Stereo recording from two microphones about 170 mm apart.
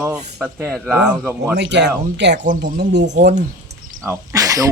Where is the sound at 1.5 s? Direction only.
90° right.